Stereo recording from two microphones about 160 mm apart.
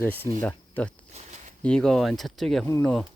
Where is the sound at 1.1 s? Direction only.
45° right (ahead or behind).